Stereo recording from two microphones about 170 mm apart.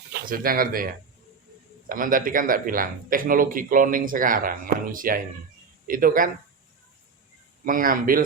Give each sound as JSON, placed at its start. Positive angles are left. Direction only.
{"t": 0.3, "sound": "speech", "side_deg": -55}
{"t": 1.9, "sound": "speech", "side_deg": -55}
{"t": 7.6, "sound": "speech", "side_deg": -55}